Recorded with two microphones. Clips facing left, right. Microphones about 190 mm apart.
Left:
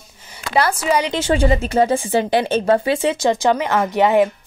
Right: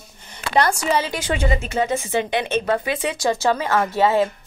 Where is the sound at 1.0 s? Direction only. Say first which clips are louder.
Left 6 dB; 25° left (ahead or behind).